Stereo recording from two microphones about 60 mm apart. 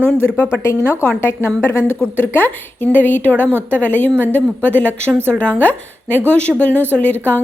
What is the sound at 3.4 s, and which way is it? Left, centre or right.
Speech, right.